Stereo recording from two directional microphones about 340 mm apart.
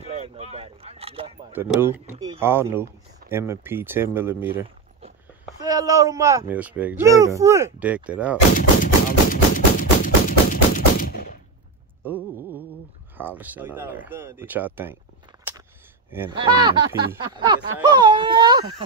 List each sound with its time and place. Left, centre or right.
0.0 s a sound: centre
1.5 s speech: centre
8.5 s music: left
12.0 s a sound: centre
13.2 s speech: centre
16.1 s speech: centre